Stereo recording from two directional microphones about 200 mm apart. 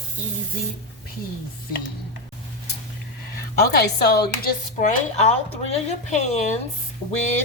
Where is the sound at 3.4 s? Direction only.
55° left (ahead or behind).